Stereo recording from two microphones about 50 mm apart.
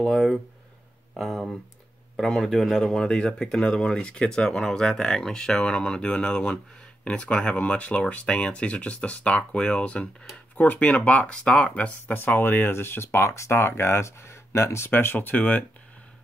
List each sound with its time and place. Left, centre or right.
0.0 s speech: centre; by 10.0 s left
10.5 s speech: left
12.1 s speech: left
14.9 s speech: left